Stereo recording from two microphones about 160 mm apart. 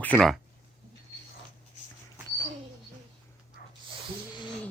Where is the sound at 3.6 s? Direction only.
85° left.